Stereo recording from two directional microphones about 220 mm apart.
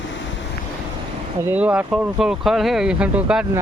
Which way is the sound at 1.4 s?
10° right (ahead or behind).